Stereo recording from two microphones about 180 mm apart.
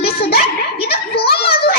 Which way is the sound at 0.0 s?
60° left (ahead or behind).